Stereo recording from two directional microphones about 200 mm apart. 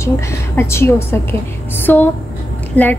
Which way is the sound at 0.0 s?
15° left (ahead or behind).